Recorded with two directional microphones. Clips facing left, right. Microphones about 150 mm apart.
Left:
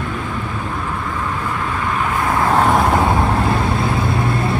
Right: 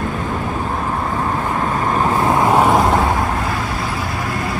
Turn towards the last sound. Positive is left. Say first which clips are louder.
# right 1 dB
turn(degrees=0)  # may be behind; listen again after turning